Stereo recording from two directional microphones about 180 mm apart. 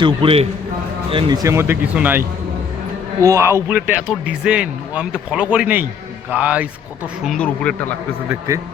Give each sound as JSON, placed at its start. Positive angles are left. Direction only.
{"t": 0.0, "sound": "a man's voice", "side_deg": -30}
{"t": 7.3, "sound": "speech", "side_deg": 5}